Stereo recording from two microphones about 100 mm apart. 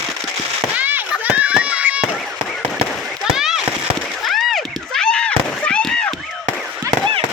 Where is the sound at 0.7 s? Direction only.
15° right (ahead or behind).